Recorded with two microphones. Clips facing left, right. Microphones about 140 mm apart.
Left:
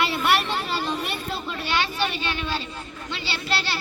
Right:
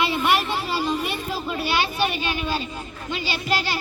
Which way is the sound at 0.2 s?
Centre (ahead or behind).